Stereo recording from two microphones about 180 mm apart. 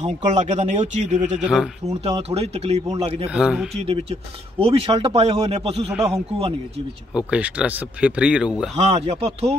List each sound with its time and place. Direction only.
0.0 s speech: 40° right (ahead or behind)
1.4 s speech: 5° right (ahead or behind)
2.2 s speech: 35° right (ahead or behind)
3.3 s speech: 5° right (ahead or behind)
3.7 s speech: 35° right (ahead or behind)
7.2 s speech: 5° right (ahead or behind)
8.7 s speech: 35° right (ahead or behind)